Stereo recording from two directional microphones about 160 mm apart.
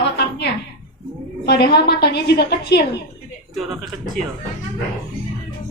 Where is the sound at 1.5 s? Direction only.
90° left.